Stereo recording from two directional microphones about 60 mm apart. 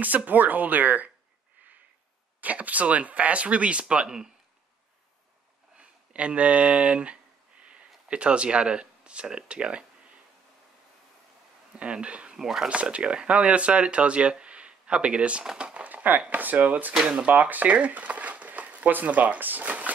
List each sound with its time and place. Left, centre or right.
0.0 s speech: right
2.4 s speech: right
5.8 s speech: centre
11.8 s speech: centre
12.4 s speech: centre
12.6 s speech: centre
17.3 s speech: right